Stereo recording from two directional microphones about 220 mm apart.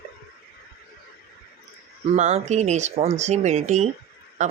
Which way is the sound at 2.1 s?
30° right (ahead or behind).